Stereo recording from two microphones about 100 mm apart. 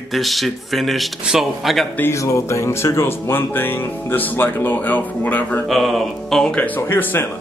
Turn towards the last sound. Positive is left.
turn(degrees=20)  # may be behind; listen again after turning